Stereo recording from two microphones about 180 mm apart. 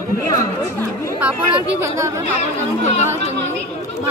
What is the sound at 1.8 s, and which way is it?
Speech, 15° right (ahead or behind).